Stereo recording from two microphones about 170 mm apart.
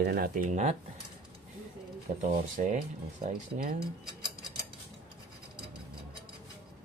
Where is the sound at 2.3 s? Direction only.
50° right (ahead or behind).